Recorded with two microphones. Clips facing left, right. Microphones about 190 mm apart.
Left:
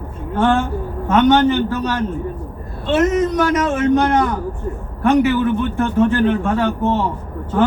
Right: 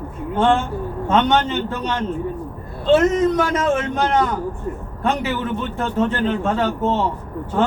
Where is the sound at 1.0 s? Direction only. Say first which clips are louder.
Left 5 dB; 25° right (ahead or behind).